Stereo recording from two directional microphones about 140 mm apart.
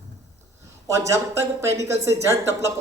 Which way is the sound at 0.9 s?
20° right (ahead or behind).